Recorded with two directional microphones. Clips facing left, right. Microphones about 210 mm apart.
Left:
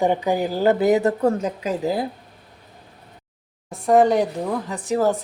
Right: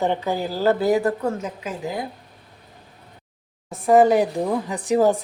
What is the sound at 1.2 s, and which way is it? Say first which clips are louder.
Speech: left 5 dB; 35° left (ahead or behind).